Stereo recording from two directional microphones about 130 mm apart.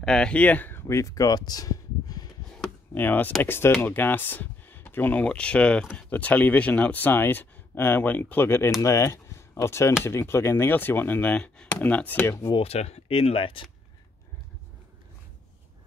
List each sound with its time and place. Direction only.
0.0 s speech: 5° left (ahead or behind); by 2.2 s 30° left (ahead or behind)
2.9 s speech: 15° left (ahead or behind)
12.5 s speech: 55° left (ahead or behind)